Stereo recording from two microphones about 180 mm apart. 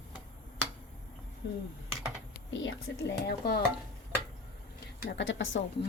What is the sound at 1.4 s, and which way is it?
Speech, 70° left (ahead or behind).